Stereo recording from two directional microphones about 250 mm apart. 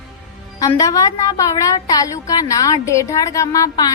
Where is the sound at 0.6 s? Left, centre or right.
Centre.